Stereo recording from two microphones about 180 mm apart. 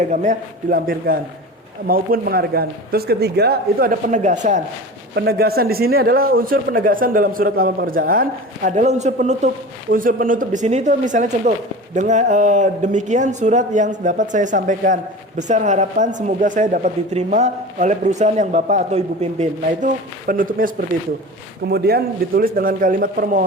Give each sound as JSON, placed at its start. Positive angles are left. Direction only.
{"t": 0.0, "sound": "a man's voice", "side_deg": -45}
{"t": 5.1, "sound": "a man's voice", "side_deg": -65}
{"t": 21.7, "sound": "a man's voice", "side_deg": -60}